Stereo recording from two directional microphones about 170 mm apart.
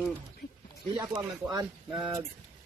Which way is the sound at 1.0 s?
20° right (ahead or behind).